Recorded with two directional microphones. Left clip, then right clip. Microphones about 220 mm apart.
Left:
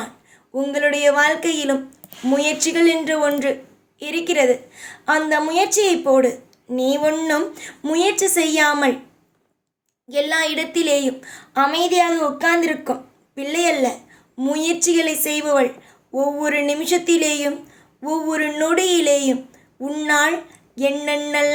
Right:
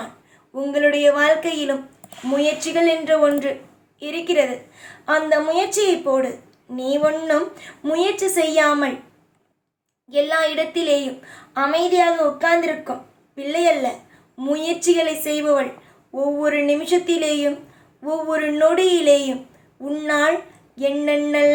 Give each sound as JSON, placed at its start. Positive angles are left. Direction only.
{"t": 0.6, "sound": "a woman's voice", "side_deg": 45}
{"t": 10.1, "sound": "a woman's voice", "side_deg": 50}